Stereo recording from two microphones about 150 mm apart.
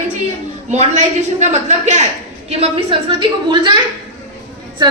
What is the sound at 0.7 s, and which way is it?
Speech, 50° right (ahead or behind).